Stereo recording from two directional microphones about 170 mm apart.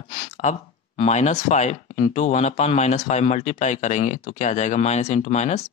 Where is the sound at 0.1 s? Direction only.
45° left (ahead or behind).